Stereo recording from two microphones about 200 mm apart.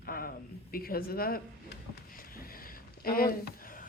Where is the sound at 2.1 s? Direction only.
45° left (ahead or behind).